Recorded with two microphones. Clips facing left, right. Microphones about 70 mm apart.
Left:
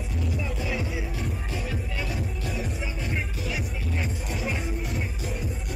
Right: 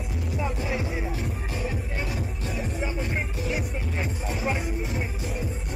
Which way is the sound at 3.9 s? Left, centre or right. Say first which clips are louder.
Even; right.